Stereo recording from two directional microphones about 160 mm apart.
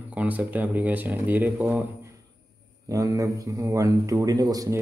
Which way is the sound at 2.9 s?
20° right (ahead or behind).